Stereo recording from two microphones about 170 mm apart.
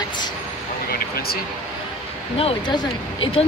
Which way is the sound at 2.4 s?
35° left (ahead or behind).